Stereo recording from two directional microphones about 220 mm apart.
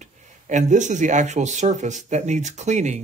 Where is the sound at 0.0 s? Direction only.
35° right (ahead or behind).